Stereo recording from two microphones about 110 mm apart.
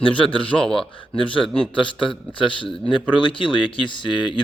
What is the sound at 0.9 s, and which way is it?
Speech, 50° left (ahead or behind).